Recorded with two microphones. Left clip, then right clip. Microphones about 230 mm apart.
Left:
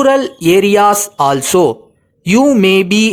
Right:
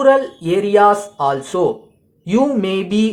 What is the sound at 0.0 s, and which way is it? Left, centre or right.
Speech, left.